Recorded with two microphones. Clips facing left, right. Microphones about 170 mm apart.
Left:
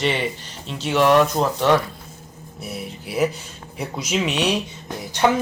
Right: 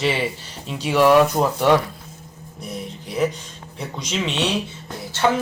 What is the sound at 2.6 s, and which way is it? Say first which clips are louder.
Music: even; 10° left (ahead or behind).